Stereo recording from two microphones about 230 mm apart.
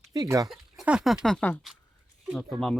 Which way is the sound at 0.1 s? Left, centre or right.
Centre.